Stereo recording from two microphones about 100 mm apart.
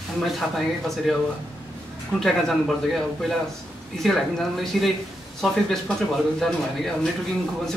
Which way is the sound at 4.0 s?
5° left (ahead or behind).